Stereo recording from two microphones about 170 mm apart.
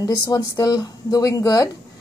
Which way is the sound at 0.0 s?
20° left (ahead or behind).